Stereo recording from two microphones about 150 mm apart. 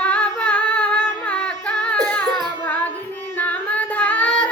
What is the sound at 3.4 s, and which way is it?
Female singing, 10° left (ahead or behind).